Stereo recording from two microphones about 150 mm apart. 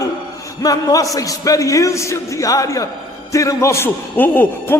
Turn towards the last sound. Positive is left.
turn(degrees=15)  # may be behind; listen again after turning